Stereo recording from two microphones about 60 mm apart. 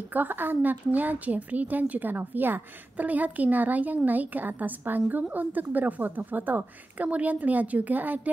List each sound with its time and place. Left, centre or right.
0.1 s a woman's voice: right